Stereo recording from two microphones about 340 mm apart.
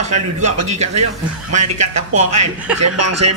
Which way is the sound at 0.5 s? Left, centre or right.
Right.